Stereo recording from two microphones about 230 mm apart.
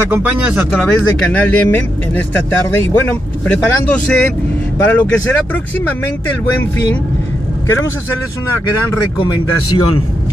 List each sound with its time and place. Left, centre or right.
0.1 s speech: centre
9.7 s a man's voice: left